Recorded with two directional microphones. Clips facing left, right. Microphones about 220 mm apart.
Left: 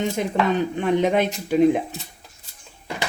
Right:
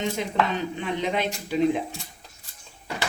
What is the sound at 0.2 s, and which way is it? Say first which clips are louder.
Speech: left 5 dB; 50° left (ahead or behind).